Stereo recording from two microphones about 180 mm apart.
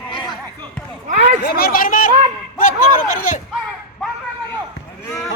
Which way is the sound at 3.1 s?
45° left (ahead or behind).